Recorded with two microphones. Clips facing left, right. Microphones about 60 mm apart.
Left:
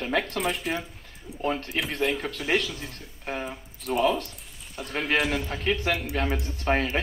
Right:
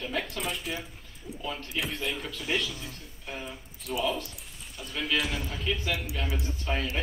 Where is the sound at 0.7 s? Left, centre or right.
Left.